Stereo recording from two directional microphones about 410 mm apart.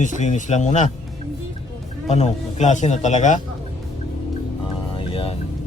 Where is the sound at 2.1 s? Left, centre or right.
Centre.